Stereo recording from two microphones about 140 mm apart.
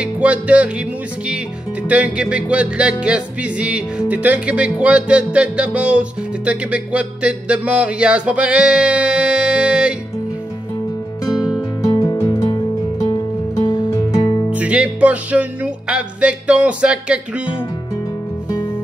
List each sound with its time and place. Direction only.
0.0 s music: 10° right (ahead or behind)
11.8 s music: 25° left (ahead or behind)
14.5 s music: 10° right (ahead or behind)